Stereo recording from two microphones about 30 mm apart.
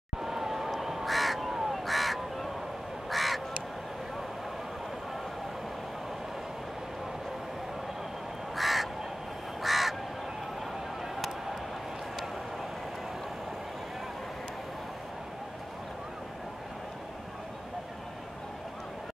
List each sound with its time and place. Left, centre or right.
0.2 s crow: centre
8.5 s crow: centre